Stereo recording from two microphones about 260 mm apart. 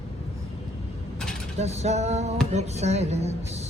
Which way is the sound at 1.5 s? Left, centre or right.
Right.